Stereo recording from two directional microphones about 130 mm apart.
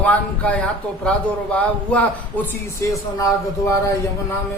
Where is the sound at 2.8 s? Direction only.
25° left (ahead or behind).